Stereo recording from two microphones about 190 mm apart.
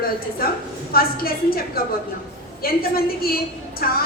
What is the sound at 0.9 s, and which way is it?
Speech, 50° left (ahead or behind).